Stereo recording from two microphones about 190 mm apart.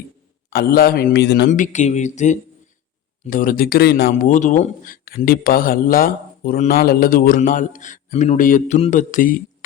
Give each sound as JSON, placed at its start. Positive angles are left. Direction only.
{"t": 0.5, "sound": "speech", "side_deg": 50}
{"t": 1.5, "sound": "speech", "side_deg": 40}
{"t": 4.3, "sound": "speech", "side_deg": 40}